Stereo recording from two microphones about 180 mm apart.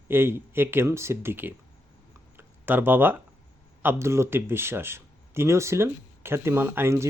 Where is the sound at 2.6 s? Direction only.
10° right (ahead or behind).